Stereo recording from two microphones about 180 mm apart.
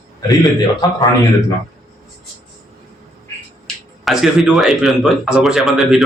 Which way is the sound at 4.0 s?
Centre (ahead or behind).